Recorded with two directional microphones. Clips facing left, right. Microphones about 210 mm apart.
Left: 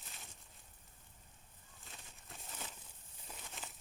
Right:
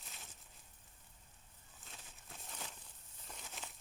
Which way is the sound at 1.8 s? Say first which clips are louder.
Left 1 dB; centre (ahead or behind).